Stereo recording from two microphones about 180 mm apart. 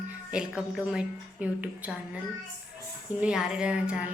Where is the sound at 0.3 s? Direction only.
5° right (ahead or behind).